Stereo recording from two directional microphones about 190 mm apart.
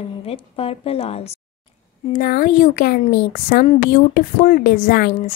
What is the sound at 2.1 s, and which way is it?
Speech, 50° left (ahead or behind).